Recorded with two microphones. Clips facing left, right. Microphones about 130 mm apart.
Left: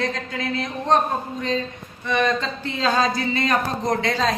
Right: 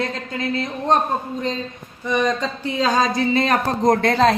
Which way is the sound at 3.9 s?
55° right (ahead or behind).